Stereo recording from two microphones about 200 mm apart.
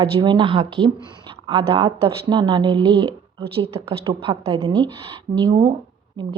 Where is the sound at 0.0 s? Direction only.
20° right (ahead or behind).